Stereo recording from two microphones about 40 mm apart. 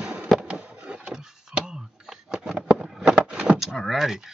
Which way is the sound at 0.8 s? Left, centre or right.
Right.